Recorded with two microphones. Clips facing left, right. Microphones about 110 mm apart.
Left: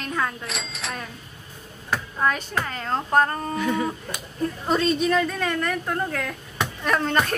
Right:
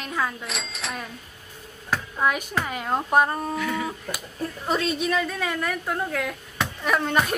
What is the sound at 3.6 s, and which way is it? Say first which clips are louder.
Speech: left 7 dB; 25° left (ahead or behind).